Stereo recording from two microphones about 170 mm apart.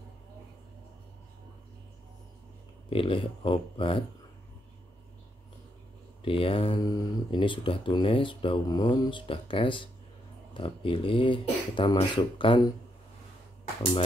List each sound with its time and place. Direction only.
2.9 s speech: 30° left (ahead or behind)
6.2 s speech: 30° left (ahead or behind)